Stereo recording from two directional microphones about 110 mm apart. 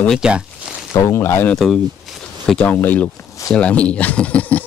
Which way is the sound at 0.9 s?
25° left (ahead or behind).